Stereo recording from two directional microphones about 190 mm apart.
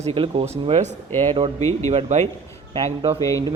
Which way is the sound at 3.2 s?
15° left (ahead or behind).